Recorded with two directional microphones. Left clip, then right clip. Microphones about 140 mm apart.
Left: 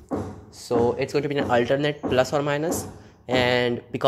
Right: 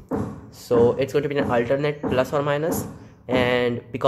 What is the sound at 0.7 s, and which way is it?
Speech, 15° left (ahead or behind).